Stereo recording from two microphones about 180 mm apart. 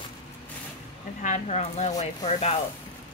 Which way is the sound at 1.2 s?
40° left (ahead or behind).